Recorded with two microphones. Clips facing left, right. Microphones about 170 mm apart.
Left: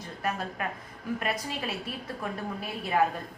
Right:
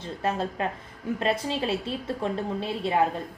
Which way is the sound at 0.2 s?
25° right (ahead or behind).